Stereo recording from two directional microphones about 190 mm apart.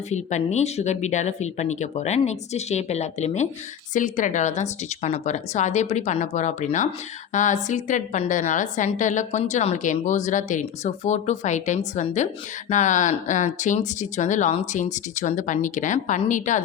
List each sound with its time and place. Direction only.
0.1 s a woman's voice: 35° left (ahead or behind)